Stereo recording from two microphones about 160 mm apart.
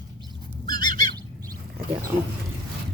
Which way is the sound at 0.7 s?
25° left (ahead or behind).